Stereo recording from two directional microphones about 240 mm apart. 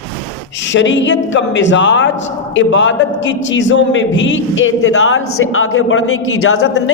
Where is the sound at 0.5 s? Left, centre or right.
Left.